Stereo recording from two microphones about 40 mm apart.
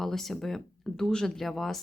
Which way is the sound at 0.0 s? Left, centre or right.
Centre.